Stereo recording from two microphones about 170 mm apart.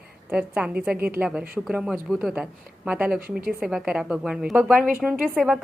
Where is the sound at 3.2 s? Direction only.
60° right (ahead or behind).